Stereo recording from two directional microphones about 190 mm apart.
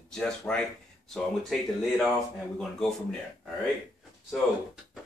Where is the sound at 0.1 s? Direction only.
5° left (ahead or behind).